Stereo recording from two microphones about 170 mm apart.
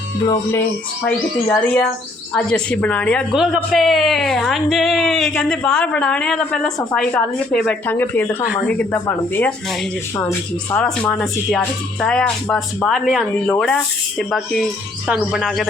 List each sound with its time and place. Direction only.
1.0 s a woman's voice: 10° left (ahead or behind)
10.8 s a woman's voice: 5° left (ahead or behind)